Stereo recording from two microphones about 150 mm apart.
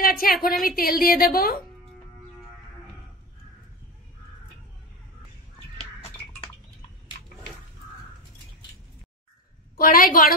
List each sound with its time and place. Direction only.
0.0 s a woman's voice: 75° left (ahead or behind)
9.8 s a woman's voice: 70° left (ahead or behind)